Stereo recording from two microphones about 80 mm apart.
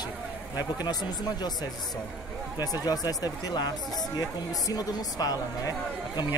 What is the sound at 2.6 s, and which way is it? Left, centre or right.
Speech, left.